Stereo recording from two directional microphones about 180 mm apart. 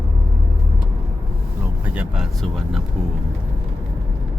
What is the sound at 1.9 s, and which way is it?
Speech, 5° right (ahead or behind).